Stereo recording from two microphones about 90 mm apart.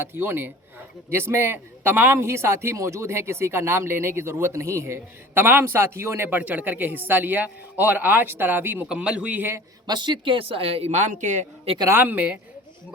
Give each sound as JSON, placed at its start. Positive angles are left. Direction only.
{"t": 0.0, "sound": "a man's voice", "side_deg": -25}
{"t": 9.8, "sound": "speech", "side_deg": -55}
{"t": 11.9, "sound": "a man's voice", "side_deg": -20}